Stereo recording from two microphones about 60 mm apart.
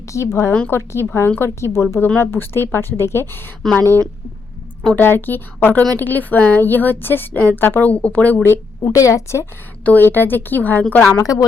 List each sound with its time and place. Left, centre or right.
0.1 s a woman's voice: left
3.6 s a woman's voice: centre
4.9 s a woman's voice: left
8.8 s a woman's voice: left
9.8 s a woman's voice: left
11.2 s speech: left